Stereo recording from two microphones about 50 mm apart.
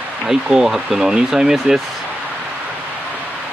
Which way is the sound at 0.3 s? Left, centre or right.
Centre.